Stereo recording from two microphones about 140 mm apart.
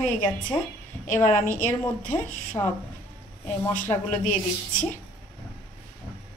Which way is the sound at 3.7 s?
65° left (ahead or behind).